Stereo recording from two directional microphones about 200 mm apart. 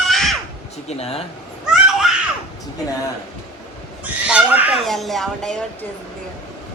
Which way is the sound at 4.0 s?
5° right (ahead or behind).